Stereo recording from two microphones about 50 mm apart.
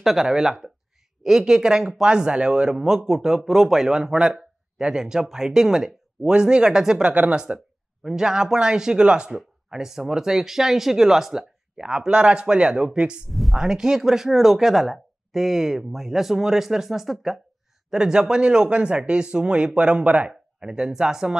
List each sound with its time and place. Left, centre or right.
0.0 s speech: centre
7.1 s speech: right
13.3 s a sound: centre
13.6 s speech: centre; by 20.3 s right
20.6 s speech: centre